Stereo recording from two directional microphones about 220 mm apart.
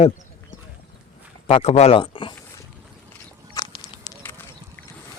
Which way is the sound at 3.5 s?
15° left (ahead or behind).